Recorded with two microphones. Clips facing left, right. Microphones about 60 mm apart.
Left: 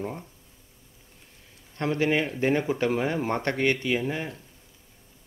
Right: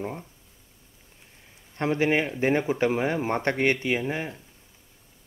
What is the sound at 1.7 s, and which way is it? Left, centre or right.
Speech, right.